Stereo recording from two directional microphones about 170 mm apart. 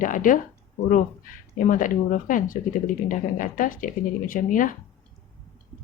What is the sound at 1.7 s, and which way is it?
Speech, 50° left (ahead or behind).